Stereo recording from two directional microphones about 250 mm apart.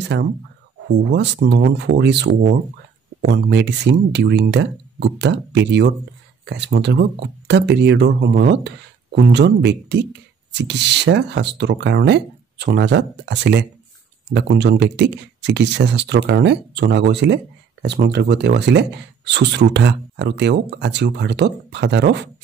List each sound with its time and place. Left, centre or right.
0.1 s speech: right